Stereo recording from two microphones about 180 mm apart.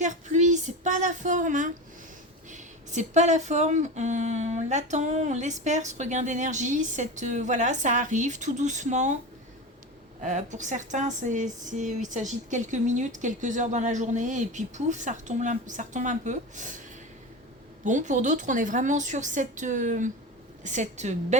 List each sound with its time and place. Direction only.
0.0 s a sound: 40° right (ahead or behind)
2.5 s speech: 40° right (ahead or behind)
10.2 s a woman's voice: 40° right (ahead or behind)
17.8 s a woman's voice: 45° right (ahead or behind)